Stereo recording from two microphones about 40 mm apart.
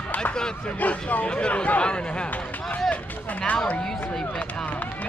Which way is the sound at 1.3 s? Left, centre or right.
Left.